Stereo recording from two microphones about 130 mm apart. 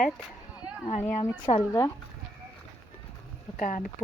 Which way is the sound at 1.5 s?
50° left (ahead or behind).